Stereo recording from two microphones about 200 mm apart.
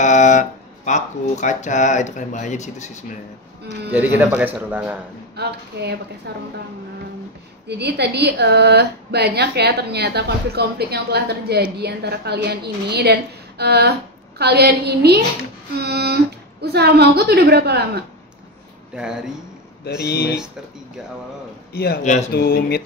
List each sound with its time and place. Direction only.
0.0 s speech: 40° left (ahead or behind)
3.9 s speech: 10° right (ahead or behind)
5.3 s a woman's voice: 55° right (ahead or behind)
7.6 s a woman's voice: 55° right (ahead or behind)
18.9 s speech: 5° right (ahead or behind)
19.8 s speech: 55° left (ahead or behind)
21.7 s speech: 50° left (ahead or behind)